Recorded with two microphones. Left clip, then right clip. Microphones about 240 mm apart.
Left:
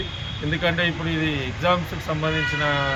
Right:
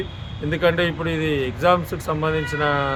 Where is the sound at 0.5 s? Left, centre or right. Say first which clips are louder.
Right 3 dB; centre.